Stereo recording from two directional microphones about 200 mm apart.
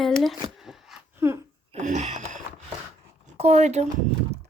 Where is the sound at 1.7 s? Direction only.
35° right (ahead or behind).